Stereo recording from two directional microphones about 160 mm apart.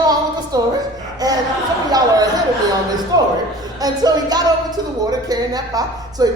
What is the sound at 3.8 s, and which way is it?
Speech, 25° right (ahead or behind).